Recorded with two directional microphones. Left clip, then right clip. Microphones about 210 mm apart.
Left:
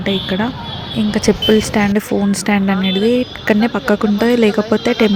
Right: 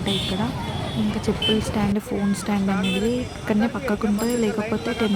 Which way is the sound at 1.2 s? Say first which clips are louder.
Left 10 dB; 25° left (ahead or behind).